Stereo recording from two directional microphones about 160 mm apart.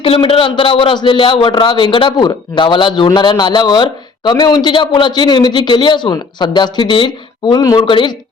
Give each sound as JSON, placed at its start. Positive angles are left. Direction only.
{"t": 0.0, "sound": "a man's voice", "side_deg": 35}